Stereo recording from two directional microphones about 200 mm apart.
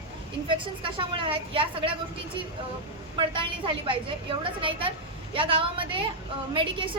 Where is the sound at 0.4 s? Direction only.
25° right (ahead or behind).